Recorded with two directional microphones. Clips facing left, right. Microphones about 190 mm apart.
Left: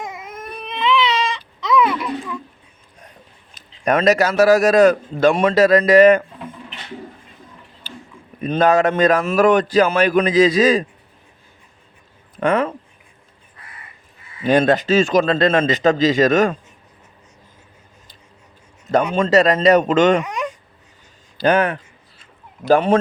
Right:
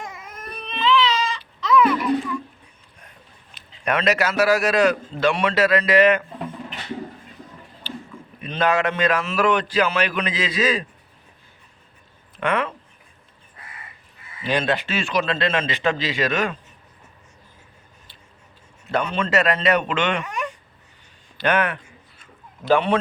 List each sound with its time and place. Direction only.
0.2 s baby cry: 90° left
0.6 s baby cry: 15° left (ahead or behind)
3.5 s a man's voice: 40° left (ahead or behind)
7.9 s a sound: 45° left (ahead or behind)
8.4 s a man's voice: 45° left (ahead or behind)
12.4 s speech: 40° left (ahead or behind)
14.4 s a man's voice: 45° left (ahead or behind)
19.1 s speech: 40° left (ahead or behind)
20.2 s a sound: 15° left (ahead or behind)
21.3 s speech: 35° left (ahead or behind)
22.2 s a sound: 40° left (ahead or behind)